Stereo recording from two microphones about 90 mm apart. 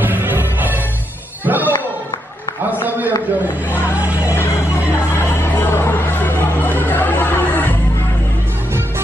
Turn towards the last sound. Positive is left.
turn(degrees=20)  # may be behind; listen again after turning